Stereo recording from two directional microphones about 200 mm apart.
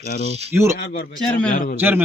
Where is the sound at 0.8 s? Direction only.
50° left (ahead or behind).